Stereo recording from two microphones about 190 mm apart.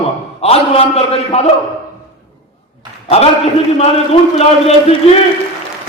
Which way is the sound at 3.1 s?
30° left (ahead or behind).